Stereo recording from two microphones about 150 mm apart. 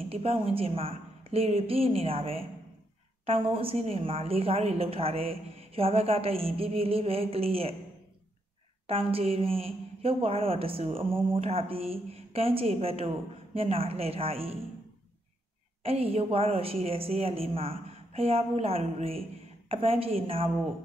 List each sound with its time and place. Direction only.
0.1 s a woman's voice: 40° right (ahead or behind)
8.8 s a woman's voice: 40° right (ahead or behind)
15.8 s a woman's voice: 40° right (ahead or behind)